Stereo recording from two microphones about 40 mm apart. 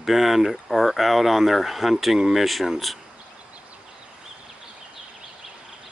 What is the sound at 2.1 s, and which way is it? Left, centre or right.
Speech, centre.